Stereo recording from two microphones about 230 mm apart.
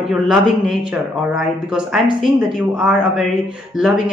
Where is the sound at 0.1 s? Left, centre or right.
Centre.